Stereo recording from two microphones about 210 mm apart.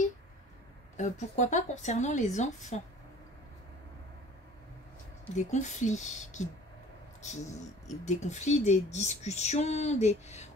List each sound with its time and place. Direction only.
0.9 s speech: 35° left (ahead or behind)
5.3 s speech: 35° left (ahead or behind)